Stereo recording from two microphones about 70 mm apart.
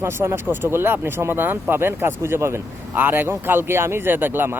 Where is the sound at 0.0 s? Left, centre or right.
Right.